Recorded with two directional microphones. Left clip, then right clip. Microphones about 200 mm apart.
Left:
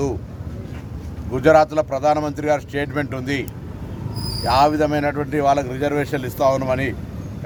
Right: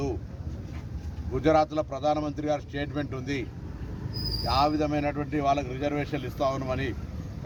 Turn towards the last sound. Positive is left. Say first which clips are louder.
# left 10 dB
turn(degrees=10)  # may be behind; listen again after turning